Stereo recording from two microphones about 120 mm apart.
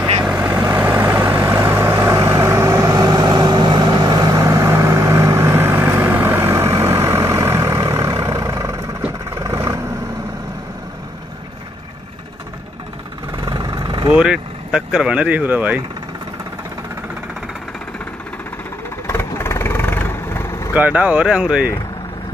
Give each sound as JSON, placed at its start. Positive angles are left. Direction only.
{"t": 0.2, "sound": "vehicle", "side_deg": -15}
{"t": 13.4, "sound": "vehicle", "side_deg": -40}
{"t": 14.1, "sound": "speech", "side_deg": -5}
{"t": 19.0, "sound": "vehicle", "side_deg": 20}
{"t": 20.7, "sound": "speech", "side_deg": -10}